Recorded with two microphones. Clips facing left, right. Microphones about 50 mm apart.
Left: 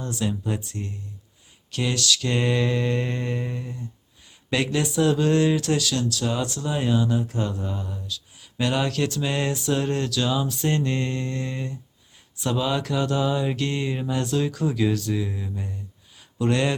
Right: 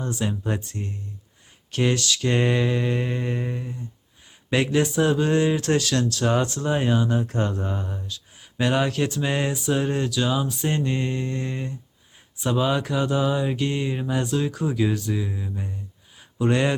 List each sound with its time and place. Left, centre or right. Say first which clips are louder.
0.0 s speech: even; right
0.4 s speech: right 1 dB; right
2.6 s speech: even; centre
4.5 s speech: right 2 dB; right
5.6 s speech: right 2 dB; right
7.2 s speech: right 2 dB; right; by 15.3 s centre
15.3 s speech: right 1 dB; centre
16.1 s a sound: right 1 dB; centre